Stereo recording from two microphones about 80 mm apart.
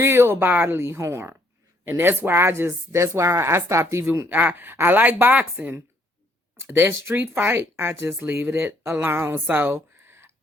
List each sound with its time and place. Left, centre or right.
0.0 s speech: right
6.6 s speech: right